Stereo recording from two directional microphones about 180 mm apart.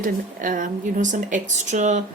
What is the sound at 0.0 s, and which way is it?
A woman's voice, 50° right (ahead or behind).